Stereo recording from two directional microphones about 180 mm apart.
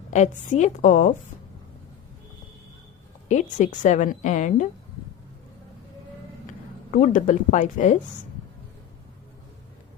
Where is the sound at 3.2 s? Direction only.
40° left (ahead or behind).